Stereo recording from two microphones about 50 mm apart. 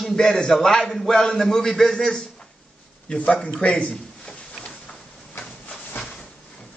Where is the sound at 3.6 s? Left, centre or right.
Left.